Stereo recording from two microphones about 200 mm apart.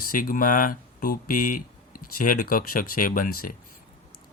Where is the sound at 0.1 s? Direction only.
45° left (ahead or behind).